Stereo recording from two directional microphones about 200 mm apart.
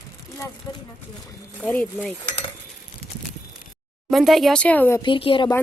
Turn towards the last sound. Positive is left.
turn(degrees=25)  # may be behind; listen again after turning